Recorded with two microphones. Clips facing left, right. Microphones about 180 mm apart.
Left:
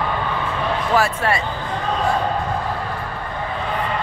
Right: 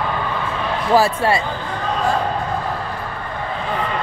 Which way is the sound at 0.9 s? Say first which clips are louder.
Right 5 dB; 30° right (ahead or behind).